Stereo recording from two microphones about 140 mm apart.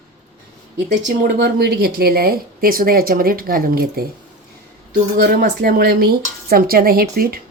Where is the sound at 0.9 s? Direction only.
60° right (ahead or behind).